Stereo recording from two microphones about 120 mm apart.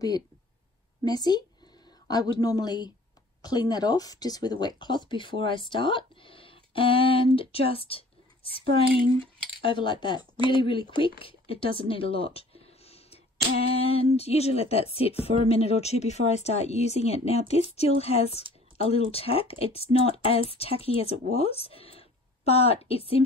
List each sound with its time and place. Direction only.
1.0 s a man's voice: 35° left (ahead or behind); by 23.2 s 55° left (ahead or behind)